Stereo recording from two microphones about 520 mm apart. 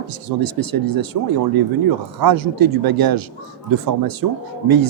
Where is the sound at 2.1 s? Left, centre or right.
Right.